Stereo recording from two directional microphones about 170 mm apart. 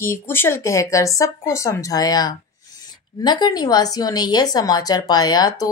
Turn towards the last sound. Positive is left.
turn(degrees=20)  # may be behind; listen again after turning